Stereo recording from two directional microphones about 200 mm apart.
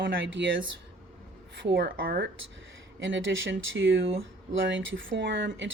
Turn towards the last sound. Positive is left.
turn(degrees=-65)  # may be behind; listen again after turning